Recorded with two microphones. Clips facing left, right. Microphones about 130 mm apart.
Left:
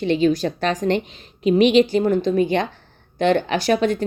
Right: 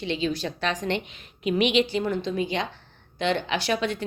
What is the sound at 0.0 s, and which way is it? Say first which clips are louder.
A woman's voice: left 9 dB; 50° left (ahead or behind).